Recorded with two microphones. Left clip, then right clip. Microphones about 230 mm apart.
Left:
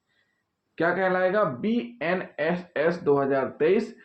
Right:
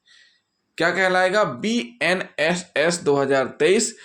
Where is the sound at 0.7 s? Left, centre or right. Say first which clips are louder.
Right 5 dB; right.